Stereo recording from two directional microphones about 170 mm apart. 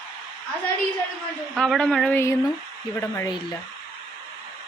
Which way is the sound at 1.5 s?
5° left (ahead or behind).